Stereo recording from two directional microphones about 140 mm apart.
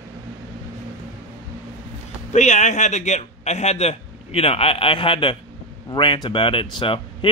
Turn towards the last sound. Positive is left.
turn(degrees=40)  # may be behind; listen again after turning